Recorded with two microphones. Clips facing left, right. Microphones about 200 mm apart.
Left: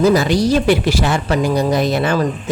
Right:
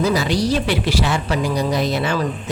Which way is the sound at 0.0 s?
50° left (ahead or behind).